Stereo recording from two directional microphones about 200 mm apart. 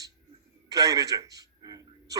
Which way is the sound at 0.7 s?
15° right (ahead or behind).